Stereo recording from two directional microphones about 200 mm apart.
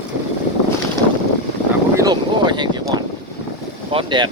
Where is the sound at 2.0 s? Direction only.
20° right (ahead or behind).